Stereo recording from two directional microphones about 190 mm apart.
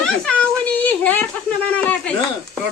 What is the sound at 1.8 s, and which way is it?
Speech, 10° left (ahead or behind).